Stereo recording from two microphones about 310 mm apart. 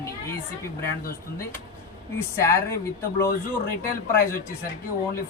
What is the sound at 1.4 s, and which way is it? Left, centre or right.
Speech, centre.